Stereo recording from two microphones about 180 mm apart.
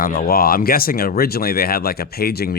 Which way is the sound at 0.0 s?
55° left (ahead or behind).